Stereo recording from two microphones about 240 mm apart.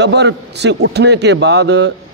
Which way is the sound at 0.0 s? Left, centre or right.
Right.